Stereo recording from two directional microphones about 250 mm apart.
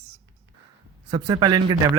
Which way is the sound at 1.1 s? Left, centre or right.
Centre.